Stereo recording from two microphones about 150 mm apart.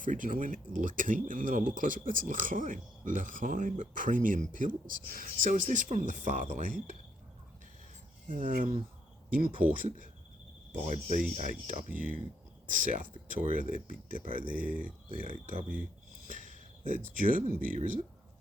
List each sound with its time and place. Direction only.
0.0 s speech: 60° right (ahead or behind)
8.3 s speech: 65° right (ahead or behind)
9.7 s speech: 65° right (ahead or behind)
11.1 s speech: 55° right (ahead or behind)